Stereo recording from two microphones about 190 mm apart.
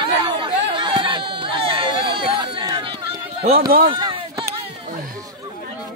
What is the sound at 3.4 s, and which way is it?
Speech, 50° right (ahead or behind).